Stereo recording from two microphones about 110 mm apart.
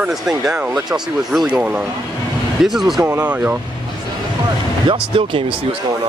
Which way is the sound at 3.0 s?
25° right (ahead or behind).